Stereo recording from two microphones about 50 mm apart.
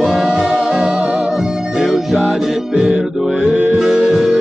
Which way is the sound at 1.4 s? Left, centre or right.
Centre.